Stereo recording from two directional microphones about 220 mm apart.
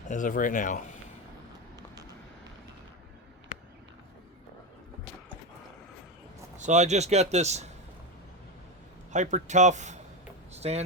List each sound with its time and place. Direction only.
0.1 s speech: 35° left (ahead or behind)
6.6 s a man's voice: 30° right (ahead or behind)
9.1 s a man's voice: 35° right (ahead or behind)